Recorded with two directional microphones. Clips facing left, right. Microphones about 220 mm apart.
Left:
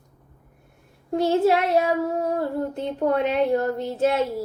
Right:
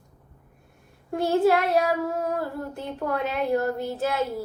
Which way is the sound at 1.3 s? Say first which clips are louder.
Even; 25° left (ahead or behind).